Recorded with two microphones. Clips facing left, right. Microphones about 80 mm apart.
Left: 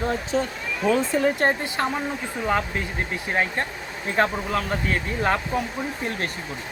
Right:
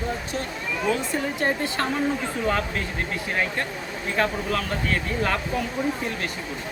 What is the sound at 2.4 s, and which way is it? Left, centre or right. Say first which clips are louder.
Speech: left 2 dB; centre.